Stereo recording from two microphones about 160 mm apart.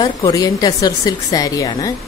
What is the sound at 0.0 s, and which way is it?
A woman's voice, 25° left (ahead or behind).